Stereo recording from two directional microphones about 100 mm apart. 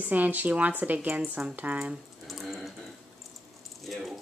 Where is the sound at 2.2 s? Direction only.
Centre (ahead or behind).